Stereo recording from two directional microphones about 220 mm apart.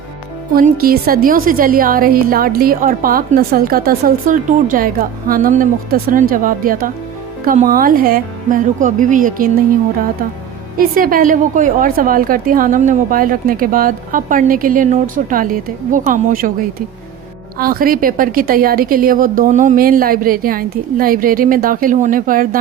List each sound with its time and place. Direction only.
0.5 s a woman's voice: 40° right (ahead or behind)
10.8 s a woman's voice: 40° right (ahead or behind)